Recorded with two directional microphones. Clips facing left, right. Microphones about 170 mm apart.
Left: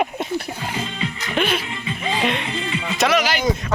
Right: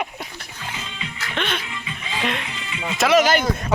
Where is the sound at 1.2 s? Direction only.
10° left (ahead or behind).